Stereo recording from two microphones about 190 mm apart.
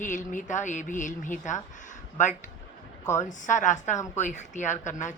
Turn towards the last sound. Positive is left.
turn(degrees=40)  # may be behind; listen again after turning